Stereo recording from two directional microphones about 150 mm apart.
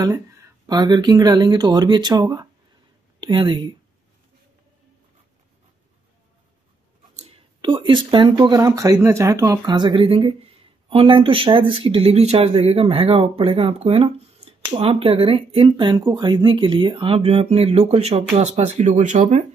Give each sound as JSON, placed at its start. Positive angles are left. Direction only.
{"t": 0.7, "sound": "speech", "side_deg": -25}
{"t": 7.2, "sound": "a sound", "side_deg": -40}
{"t": 8.4, "sound": "speech", "side_deg": -25}